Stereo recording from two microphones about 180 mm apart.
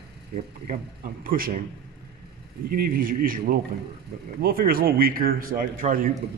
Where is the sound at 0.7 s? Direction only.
50° right (ahead or behind).